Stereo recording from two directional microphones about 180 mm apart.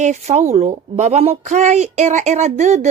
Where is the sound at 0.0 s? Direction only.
40° right (ahead or behind).